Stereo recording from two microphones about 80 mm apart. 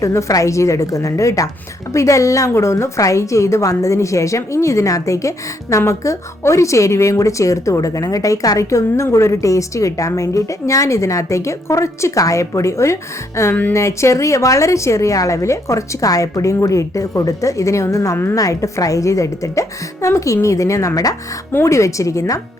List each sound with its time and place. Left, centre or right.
0.0 s a woman's voice: left